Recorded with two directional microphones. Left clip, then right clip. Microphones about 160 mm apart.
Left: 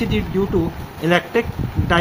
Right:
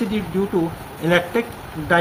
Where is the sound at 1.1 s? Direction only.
35° left (ahead or behind).